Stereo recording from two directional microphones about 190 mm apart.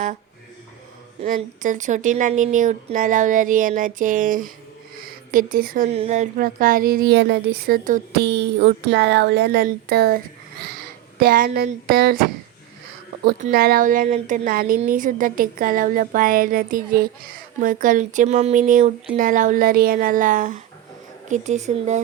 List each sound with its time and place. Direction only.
1.2 s a woman's voice: 40° right (ahead or behind)
5.9 s a woman's voice: 35° right (ahead or behind)
8.2 s speech: 65° right (ahead or behind)
13.4 s a woman's voice: 50° right (ahead or behind)